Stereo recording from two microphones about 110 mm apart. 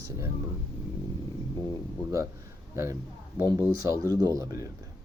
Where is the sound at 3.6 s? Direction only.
30° right (ahead or behind).